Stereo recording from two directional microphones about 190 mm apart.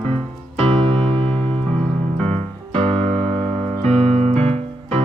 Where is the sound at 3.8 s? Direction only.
35° right (ahead or behind).